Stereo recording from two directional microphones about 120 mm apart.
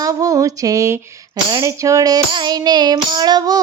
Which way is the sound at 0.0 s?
30° right (ahead or behind).